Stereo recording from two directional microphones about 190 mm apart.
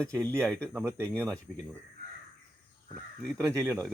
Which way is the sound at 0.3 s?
5° left (ahead or behind).